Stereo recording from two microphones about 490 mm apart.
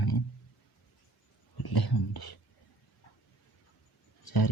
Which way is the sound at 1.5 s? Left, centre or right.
Left.